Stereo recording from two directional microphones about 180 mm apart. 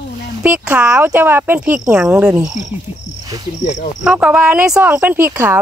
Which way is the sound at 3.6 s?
40° left (ahead or behind).